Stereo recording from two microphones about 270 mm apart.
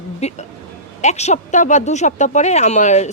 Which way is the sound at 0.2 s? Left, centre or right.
Left.